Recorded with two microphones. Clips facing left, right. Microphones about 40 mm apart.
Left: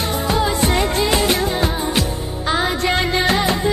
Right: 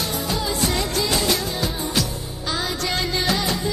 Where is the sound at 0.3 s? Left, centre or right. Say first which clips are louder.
Left 7 dB; left.